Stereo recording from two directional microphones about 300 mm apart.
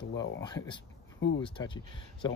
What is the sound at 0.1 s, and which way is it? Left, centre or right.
Speech, left.